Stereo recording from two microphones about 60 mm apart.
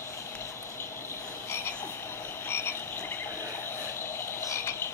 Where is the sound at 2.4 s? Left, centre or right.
Left.